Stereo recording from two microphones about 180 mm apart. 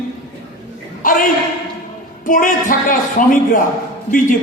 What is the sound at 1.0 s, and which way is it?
A woman's voice, 50° left (ahead or behind).